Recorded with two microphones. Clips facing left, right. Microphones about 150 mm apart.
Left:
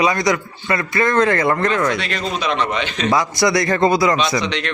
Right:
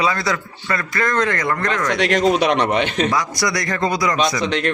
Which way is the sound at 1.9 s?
75° right (ahead or behind).